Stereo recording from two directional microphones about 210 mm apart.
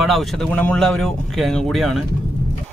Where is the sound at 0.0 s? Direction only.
Centre (ahead or behind).